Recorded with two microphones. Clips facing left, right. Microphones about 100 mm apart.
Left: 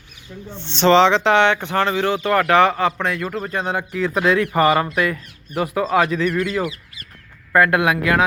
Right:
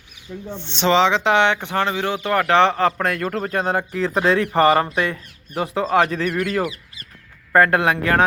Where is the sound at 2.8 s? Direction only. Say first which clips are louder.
Right 1 dB; 45° right (ahead or behind).